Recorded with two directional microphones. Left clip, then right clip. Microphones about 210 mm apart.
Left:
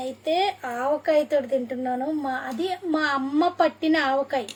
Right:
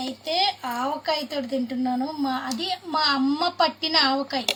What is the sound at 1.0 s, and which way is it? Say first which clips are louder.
A woman's voice: left 5 dB; 20° left (ahead or behind).